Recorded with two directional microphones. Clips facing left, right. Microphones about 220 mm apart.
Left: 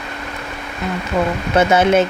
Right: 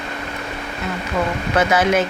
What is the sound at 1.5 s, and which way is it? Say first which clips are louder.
Speech: left 4 dB; 25° left (ahead or behind).